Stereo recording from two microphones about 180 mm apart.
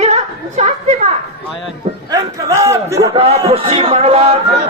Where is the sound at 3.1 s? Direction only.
35° right (ahead or behind).